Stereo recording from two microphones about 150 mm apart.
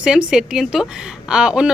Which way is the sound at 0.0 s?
5° right (ahead or behind).